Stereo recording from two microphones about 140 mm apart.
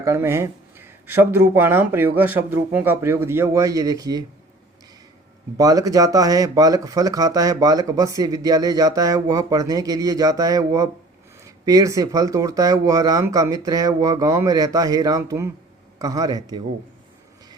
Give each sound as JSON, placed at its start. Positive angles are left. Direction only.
{"t": 0.0, "sound": "speech", "side_deg": -20}
{"t": 5.5, "sound": "speech", "side_deg": -25}